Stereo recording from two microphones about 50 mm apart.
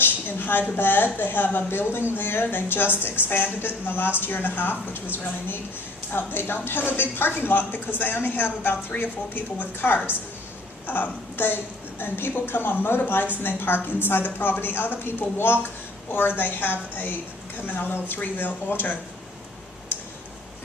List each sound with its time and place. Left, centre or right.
0.0 s a woman's voice: left